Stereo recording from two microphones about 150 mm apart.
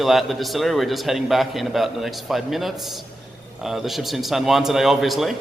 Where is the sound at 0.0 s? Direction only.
Centre (ahead or behind).